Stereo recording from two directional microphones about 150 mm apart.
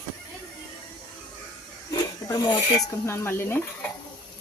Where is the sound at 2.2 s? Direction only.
25° left (ahead or behind).